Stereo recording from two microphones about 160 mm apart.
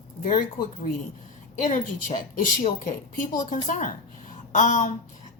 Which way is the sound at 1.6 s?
50° left (ahead or behind).